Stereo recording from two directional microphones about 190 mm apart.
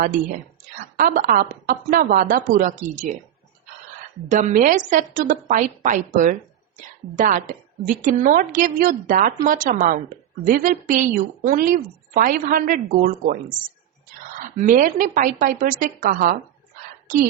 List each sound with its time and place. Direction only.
0.9 s a woman's voice: 50° right (ahead or behind)
4.3 s a woman's voice: 40° right (ahead or behind)
14.4 s a woman's voice: 40° right (ahead or behind)